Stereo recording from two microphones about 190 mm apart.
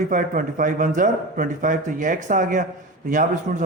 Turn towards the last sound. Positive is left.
turn(degrees=-40)  # may be behind; listen again after turning